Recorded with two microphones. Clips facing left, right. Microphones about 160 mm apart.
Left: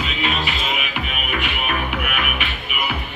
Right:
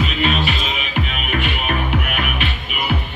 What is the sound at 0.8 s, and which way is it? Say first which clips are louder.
Music: right 3 dB; 30° right (ahead or behind).